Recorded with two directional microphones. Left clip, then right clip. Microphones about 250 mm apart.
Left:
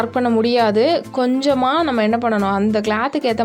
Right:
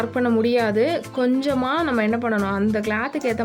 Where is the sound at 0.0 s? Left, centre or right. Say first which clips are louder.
Left 3 dB; centre.